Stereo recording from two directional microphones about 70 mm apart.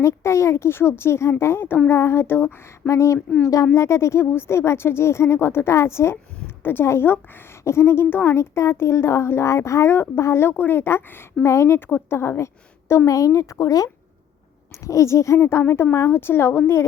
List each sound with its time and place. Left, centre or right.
0.0 s speech: left
3.2 s speech: centre
3.4 s a woman's voice: left
3.7 s speech: left
11.9 s speech: left
13.1 s speech: left